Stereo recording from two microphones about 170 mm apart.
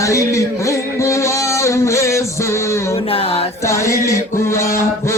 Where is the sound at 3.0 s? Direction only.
35° left (ahead or behind).